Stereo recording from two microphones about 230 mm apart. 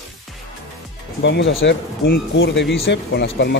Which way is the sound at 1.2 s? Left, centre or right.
Left.